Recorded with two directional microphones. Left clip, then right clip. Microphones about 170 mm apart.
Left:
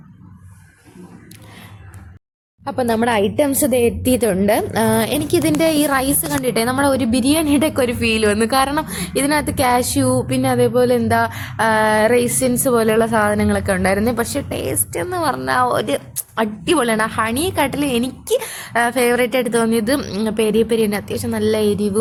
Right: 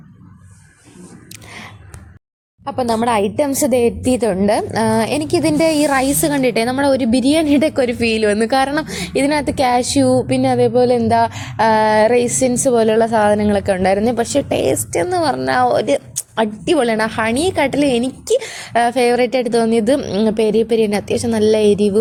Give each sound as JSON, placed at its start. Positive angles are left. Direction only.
{"t": 2.6, "sound": "a woman's voice", "side_deg": 5}
{"t": 3.1, "sound": "a woman's voice", "side_deg": -15}
{"t": 5.9, "sound": "a woman's voice", "side_deg": -15}